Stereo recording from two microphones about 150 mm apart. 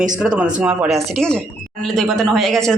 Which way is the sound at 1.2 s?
5° left (ahead or behind).